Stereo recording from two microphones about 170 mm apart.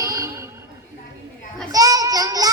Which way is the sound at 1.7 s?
20° right (ahead or behind).